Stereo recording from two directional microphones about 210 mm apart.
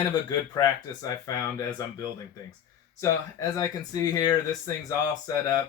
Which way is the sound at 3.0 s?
15° left (ahead or behind).